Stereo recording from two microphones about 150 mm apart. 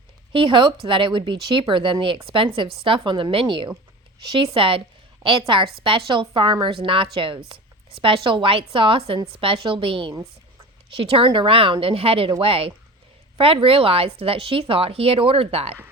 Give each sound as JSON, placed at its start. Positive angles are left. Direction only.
{"t": 0.3, "sound": "speech", "side_deg": -35}